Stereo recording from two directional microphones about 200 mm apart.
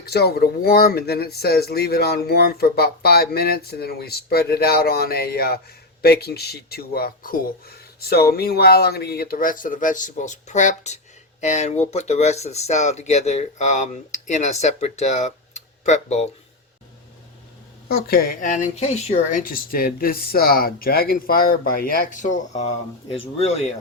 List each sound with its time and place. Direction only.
0.0 s speech: 50° left (ahead or behind); by 16.2 s 35° left (ahead or behind)
17.8 s speech: 50° left (ahead or behind)